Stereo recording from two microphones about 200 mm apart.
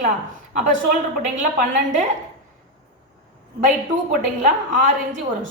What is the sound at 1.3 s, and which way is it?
Speech, 40° right (ahead or behind).